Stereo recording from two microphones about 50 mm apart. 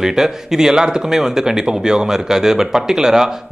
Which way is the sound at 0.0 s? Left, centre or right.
Centre.